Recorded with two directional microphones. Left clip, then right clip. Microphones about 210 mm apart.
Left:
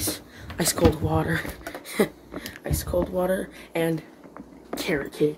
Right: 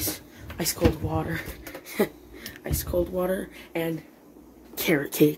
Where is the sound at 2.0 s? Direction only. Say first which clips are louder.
Left 2 dB; 5° left (ahead or behind).